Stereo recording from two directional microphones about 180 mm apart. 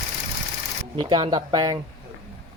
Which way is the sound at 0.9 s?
25° right (ahead or behind).